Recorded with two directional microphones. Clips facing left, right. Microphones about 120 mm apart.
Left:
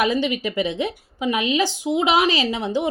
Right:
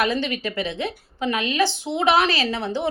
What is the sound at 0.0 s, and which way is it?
Speech, 15° left (ahead or behind).